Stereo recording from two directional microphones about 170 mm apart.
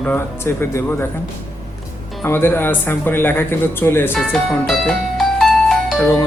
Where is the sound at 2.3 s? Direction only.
15° left (ahead or behind).